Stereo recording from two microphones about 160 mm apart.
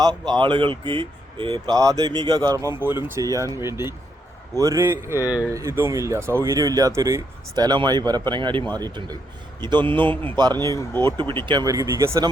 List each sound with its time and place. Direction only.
0.0 s speech: 25° right (ahead or behind)
10.7 s speech: 15° left (ahead or behind)
11.4 s speech: 25° right (ahead or behind)